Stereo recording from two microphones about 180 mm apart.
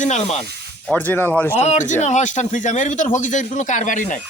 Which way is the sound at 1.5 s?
40° left (ahead or behind).